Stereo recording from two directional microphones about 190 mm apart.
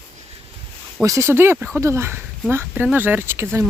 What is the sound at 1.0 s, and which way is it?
Speech, 15° right (ahead or behind).